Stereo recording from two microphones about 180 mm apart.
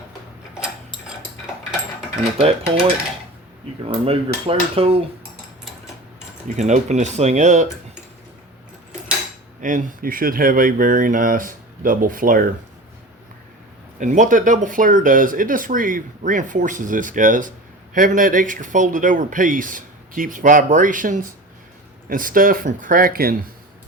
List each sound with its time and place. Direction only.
3.8 s dishes: 30° right (ahead or behind)
6.6 s dishes: 40° right (ahead or behind)
9.6 s speech: 45° right (ahead or behind)
14.0 s speech: 45° right (ahead or behind)